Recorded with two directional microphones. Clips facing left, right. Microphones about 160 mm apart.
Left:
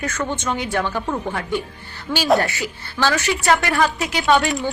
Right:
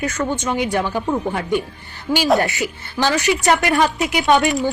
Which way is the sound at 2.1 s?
35° right (ahead or behind).